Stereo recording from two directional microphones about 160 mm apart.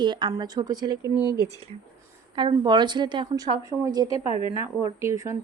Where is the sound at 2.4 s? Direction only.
30° right (ahead or behind).